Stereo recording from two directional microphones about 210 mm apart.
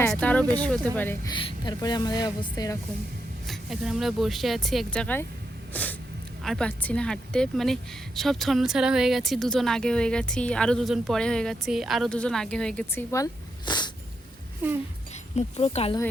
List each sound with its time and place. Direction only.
0.2 s a woman's voice: 5° left (ahead or behind)
1.3 s speech: 20° left (ahead or behind)
3.4 s a woman's voice: centre (ahead or behind)
5.7 s a sound: 5° left (ahead or behind)
6.4 s a woman's voice: 5° left (ahead or behind); by 13.9 s 20° left (ahead or behind)
14.6 s speech: 10° right (ahead or behind)
15.4 s speech: 30° left (ahead or behind)